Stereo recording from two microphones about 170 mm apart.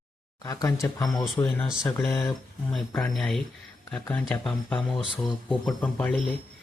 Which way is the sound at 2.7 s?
5° left (ahead or behind).